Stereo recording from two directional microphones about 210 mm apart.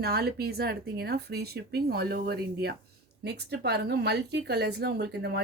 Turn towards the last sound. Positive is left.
turn(degrees=-50)  # may be behind; listen again after turning